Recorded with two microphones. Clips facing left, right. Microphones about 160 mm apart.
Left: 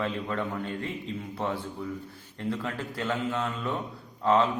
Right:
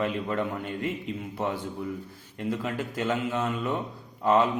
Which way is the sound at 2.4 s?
15° right (ahead or behind).